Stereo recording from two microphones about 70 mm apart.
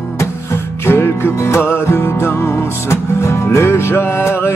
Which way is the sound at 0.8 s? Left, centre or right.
Left.